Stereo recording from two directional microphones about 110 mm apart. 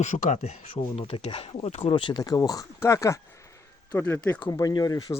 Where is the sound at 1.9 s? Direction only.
50° left (ahead or behind); by 4.2 s 20° left (ahead or behind).